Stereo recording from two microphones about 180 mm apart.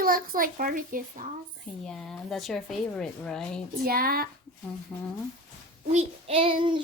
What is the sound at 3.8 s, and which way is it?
Speech, 55° right (ahead or behind).